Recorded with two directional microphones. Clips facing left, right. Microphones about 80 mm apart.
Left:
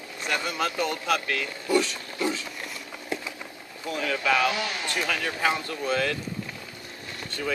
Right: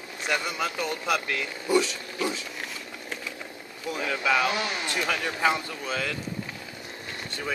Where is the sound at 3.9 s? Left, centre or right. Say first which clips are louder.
Left 1 dB; centre.